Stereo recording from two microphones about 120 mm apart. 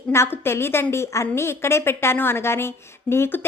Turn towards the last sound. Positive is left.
turn(degrees=20)  # may be behind; listen again after turning